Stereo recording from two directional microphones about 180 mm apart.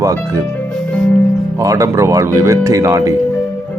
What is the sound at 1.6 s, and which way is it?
Speech, 15° right (ahead or behind).